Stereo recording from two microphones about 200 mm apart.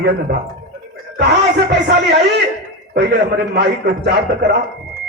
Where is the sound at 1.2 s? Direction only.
60° right (ahead or behind).